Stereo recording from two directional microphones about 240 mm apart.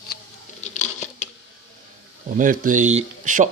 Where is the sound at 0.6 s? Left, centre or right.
Left.